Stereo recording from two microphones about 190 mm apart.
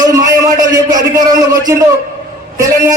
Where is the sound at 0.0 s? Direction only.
20° right (ahead or behind).